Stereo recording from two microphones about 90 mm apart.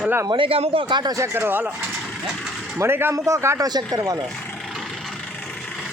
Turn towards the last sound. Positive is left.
turn(degrees=-40)  # may be behind; listen again after turning